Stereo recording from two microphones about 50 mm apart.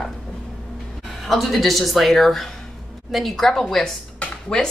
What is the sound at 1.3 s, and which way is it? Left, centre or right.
Speech, centre.